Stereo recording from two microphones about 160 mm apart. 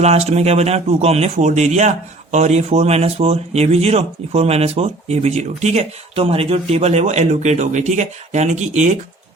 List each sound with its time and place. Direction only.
0.0 s speech: 45° right (ahead or behind)